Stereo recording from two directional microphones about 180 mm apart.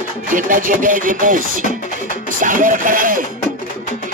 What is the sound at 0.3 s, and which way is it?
Music, 45° right (ahead or behind).